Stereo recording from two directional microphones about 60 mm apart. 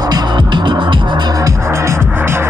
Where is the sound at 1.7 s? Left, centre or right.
Right.